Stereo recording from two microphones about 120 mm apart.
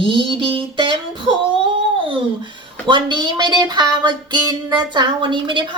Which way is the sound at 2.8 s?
40° right (ahead or behind).